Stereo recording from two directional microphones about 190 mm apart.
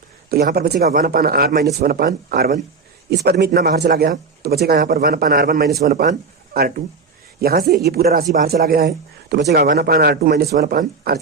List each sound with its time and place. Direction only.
0.3 s a man's voice: 55° right (ahead or behind)